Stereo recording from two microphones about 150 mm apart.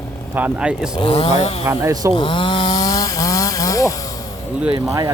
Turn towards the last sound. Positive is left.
turn(degrees=-25)  # may be behind; listen again after turning